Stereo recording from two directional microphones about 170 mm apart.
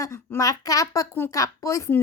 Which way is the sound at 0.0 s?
15° left (ahead or behind).